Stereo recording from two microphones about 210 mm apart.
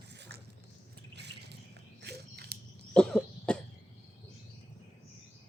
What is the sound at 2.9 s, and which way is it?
Cough, 5° left (ahead or behind).